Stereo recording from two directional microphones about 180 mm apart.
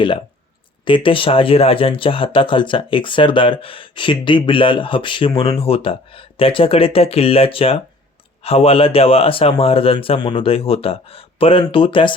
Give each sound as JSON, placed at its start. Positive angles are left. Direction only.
{"t": 0.9, "sound": "a man's voice", "side_deg": 30}